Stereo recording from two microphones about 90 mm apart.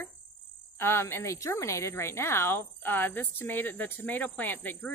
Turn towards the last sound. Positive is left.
turn(degrees=20)  # may be behind; listen again after turning